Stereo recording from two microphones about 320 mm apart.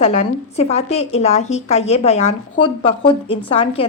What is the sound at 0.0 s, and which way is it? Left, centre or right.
A woman's voice, left.